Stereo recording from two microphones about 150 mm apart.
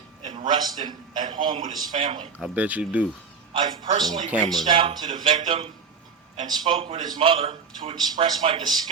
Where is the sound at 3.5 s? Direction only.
35° right (ahead or behind).